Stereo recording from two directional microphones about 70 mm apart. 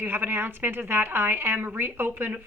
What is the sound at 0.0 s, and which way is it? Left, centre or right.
A woman's voice, right.